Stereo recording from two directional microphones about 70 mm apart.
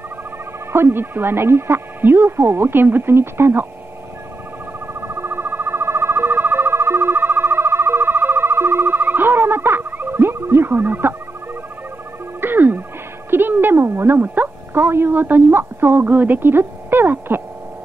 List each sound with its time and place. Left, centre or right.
0.7 s speech: right
5.0 s chirp tone: right
12.4 s frog: right
13.3 s a sound: right